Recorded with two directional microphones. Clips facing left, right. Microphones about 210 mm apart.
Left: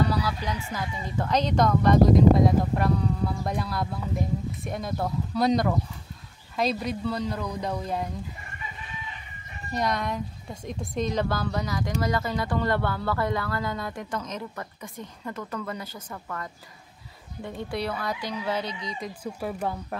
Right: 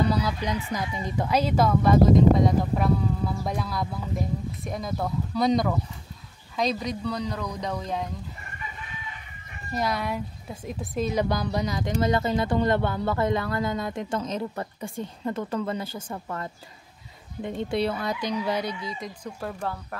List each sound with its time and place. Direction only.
0.1 s speech: 20° right (ahead or behind); by 8.1 s 5° left (ahead or behind)
9.8 s speech: 5° right (ahead or behind)
11.2 s speech: 15° right (ahead or behind); by 19.5 s 5° left (ahead or behind)
19.6 s speech: 20° left (ahead or behind)